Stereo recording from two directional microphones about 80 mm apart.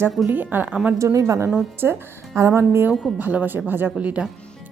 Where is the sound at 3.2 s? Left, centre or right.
Right.